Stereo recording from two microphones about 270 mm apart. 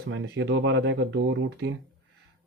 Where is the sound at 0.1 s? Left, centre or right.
Right.